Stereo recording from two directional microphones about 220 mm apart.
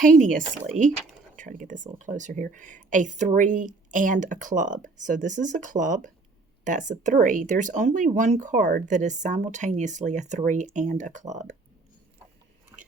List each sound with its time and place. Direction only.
0.0 s speech: 35° right (ahead or behind)